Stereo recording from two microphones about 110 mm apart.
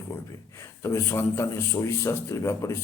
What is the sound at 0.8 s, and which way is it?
A man's voice, 25° left (ahead or behind).